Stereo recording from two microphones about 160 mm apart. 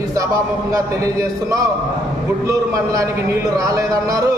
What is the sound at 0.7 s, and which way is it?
Speech, 20° right (ahead or behind).